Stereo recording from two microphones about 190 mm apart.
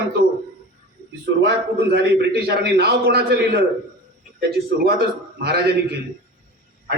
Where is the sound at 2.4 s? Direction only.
55° right (ahead or behind).